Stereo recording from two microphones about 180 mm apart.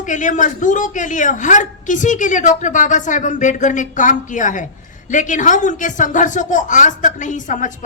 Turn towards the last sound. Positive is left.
turn(degrees=45)  # may be behind; listen again after turning